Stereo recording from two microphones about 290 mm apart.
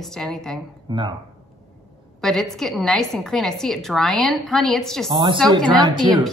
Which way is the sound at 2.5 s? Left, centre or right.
Centre.